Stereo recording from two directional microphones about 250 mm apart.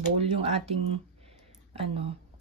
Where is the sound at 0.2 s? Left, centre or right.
Right.